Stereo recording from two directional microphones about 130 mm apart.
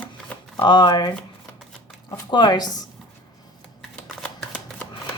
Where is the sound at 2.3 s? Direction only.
35° left (ahead or behind).